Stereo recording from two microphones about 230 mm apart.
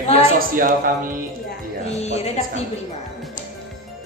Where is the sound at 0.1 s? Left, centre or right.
Right.